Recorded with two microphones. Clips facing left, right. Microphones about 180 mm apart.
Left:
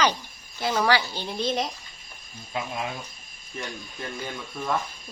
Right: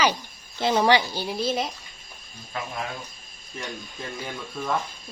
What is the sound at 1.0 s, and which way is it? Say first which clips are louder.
Speech: right 2 dB; 10° right (ahead or behind).